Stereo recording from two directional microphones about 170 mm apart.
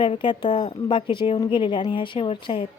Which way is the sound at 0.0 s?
30° left (ahead or behind).